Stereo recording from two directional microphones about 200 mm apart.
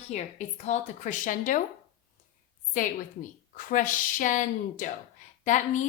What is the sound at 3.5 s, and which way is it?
A woman's voice, 40° left (ahead or behind).